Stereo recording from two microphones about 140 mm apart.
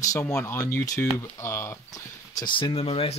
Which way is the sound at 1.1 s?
15° left (ahead or behind).